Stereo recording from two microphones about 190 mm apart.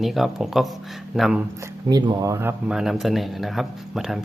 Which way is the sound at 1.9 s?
20° right (ahead or behind).